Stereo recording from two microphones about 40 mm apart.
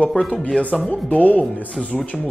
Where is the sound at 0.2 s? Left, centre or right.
Left.